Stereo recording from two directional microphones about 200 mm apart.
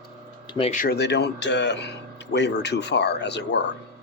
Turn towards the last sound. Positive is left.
turn(degrees=60)  # may be behind; listen again after turning